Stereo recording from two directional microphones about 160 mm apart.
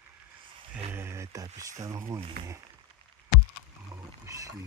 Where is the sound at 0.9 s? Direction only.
15° right (ahead or behind).